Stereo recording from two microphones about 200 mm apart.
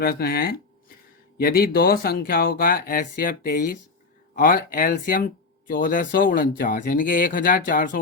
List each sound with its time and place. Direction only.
0.0 s speech: 50° left (ahead or behind)